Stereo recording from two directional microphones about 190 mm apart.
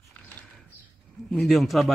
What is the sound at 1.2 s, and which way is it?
Speech, centre (ahead or behind).